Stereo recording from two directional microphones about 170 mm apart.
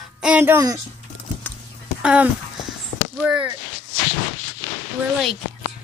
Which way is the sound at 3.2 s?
5° right (ahead or behind).